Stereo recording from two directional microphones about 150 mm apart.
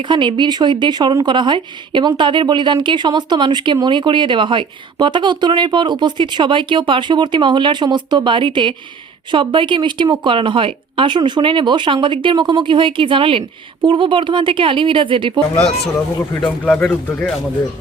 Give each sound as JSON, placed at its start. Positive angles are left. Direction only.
{"t": 0.0, "sound": "speech", "side_deg": -30}
{"t": 16.6, "sound": "speech", "side_deg": 10}